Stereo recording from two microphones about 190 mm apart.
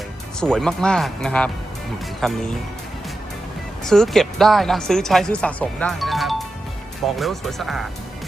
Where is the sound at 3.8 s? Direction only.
Centre (ahead or behind).